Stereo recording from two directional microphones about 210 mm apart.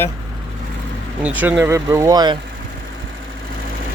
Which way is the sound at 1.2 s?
5° right (ahead or behind).